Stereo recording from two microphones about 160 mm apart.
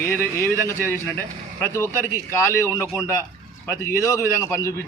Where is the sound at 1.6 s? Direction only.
15° left (ahead or behind).